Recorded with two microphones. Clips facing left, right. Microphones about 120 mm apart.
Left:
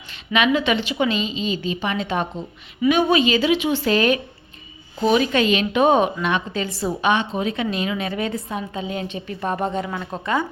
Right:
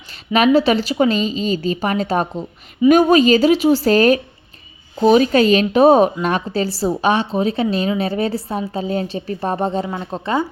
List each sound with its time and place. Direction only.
0.3 s a woman's voice: 40° right (ahead or behind)